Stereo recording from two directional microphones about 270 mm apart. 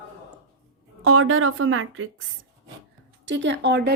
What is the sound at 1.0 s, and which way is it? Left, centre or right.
Speech, right.